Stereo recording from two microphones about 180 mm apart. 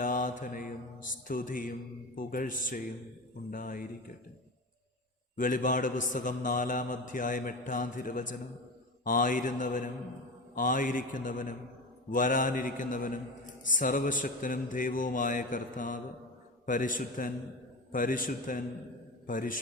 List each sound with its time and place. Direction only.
0.0 s mantra: 50° left (ahead or behind)
2.1 s a man's voice: 50° left (ahead or behind)
5.4 s a man's voice: 45° left (ahead or behind)